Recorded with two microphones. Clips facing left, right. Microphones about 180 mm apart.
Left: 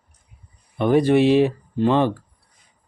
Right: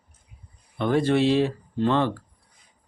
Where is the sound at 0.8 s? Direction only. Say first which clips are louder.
Left 5 dB; 15° left (ahead or behind).